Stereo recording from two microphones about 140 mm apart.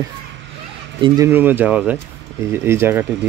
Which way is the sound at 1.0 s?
25° right (ahead or behind).